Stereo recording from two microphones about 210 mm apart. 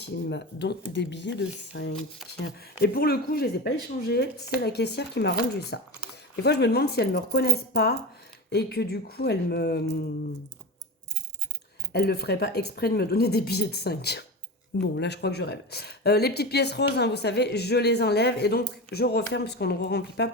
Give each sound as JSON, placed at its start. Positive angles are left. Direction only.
{"t": 0.0, "sound": "speech", "side_deg": 55}
{"t": 11.9, "sound": "speech", "side_deg": 50}